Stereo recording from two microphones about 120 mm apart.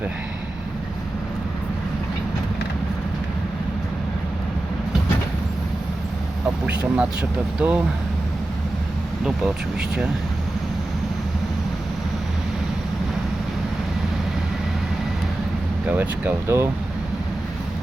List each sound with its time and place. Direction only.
6.7 s speech: 10° right (ahead or behind)
15.9 s speech: 15° right (ahead or behind)